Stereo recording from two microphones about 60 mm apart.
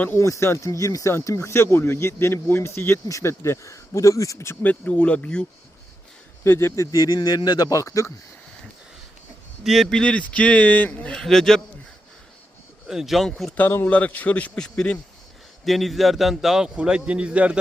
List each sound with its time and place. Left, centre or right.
0.2 s speech: left
3.1 s speech: left
4.6 s speech: left
6.4 s speech: left
6.9 s speech: left
7.6 s speech: left
9.6 s speech: centre
9.9 s speech: centre
11.1 s a man's voice: centre
12.9 s speech: centre
13.8 s speech: left
14.6 s a man's voice: centre